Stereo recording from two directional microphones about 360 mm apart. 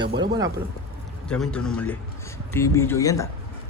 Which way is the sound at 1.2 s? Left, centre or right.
Centre.